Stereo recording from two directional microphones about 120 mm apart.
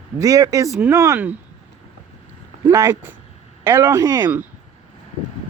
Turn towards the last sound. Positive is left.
turn(degrees=-30)  # may be behind; listen again after turning